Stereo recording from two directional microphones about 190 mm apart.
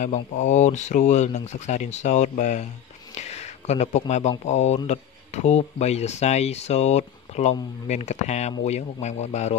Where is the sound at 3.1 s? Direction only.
35° left (ahead or behind).